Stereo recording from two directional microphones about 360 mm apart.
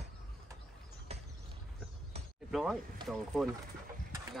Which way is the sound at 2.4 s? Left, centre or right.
Centre.